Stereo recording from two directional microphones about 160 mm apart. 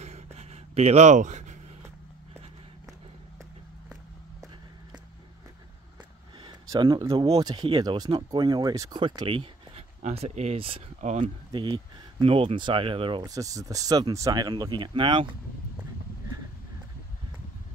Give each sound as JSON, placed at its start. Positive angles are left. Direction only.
{"t": 0.0, "sound": "a sound", "side_deg": -45}
{"t": 6.4, "sound": "speech", "side_deg": -30}
{"t": 11.5, "sound": "speech", "side_deg": -30}